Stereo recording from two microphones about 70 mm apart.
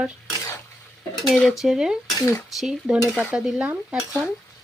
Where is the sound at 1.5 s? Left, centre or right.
Centre.